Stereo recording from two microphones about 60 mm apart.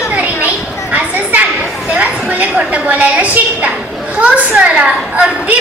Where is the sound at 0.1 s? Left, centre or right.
Right.